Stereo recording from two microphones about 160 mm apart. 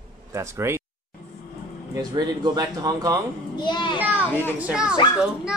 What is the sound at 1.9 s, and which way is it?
Speech, 25° right (ahead or behind).